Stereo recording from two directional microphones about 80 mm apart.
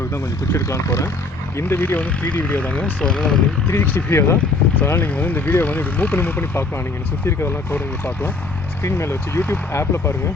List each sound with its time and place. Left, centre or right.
0.1 s speech: left
1.5 s speech: left; by 3.4 s centre
3.7 s speech: left
4.8 s speech: left